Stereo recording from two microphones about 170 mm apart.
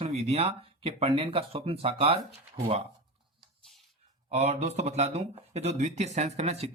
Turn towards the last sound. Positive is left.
turn(degrees=-35)  # may be behind; listen again after turning